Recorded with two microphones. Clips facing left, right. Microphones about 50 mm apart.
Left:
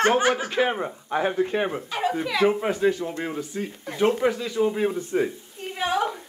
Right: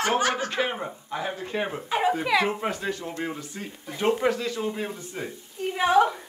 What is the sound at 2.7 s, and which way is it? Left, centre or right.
Speech, centre.